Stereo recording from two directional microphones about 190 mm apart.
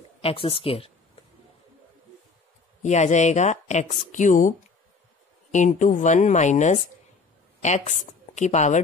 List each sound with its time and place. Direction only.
0.2 s speech: 30° left (ahead or behind)
2.8 s a woman's voice: 40° left (ahead or behind)